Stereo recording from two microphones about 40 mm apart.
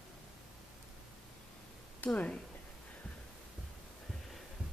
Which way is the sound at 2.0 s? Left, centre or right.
Left.